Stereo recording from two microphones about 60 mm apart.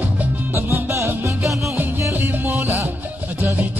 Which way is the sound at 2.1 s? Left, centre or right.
Right.